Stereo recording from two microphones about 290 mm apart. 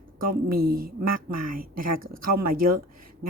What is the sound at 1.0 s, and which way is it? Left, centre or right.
Speech, right.